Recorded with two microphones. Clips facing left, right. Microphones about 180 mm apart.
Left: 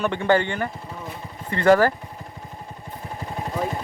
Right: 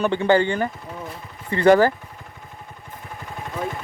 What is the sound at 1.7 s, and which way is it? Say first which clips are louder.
Speech: right 2 dB; 20° right (ahead or behind).